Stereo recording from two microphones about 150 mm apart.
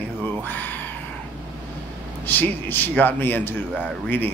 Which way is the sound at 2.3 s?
10° left (ahead or behind).